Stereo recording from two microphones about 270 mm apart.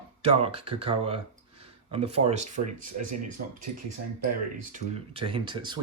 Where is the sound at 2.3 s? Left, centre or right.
Right.